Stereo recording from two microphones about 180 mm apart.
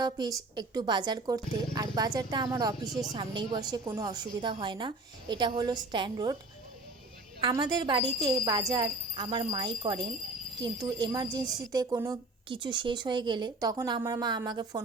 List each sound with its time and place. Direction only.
0.0 s a woman's voice: 20° right (ahead or behind)
7.4 s a woman's voice: 25° right (ahead or behind)